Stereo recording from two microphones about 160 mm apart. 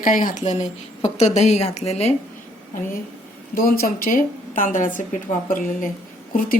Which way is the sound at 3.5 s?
65° left (ahead or behind).